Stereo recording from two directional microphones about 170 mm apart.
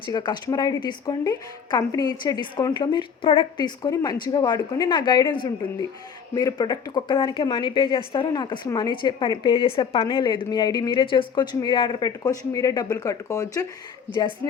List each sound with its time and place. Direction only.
0.0 s speech: 25° left (ahead or behind)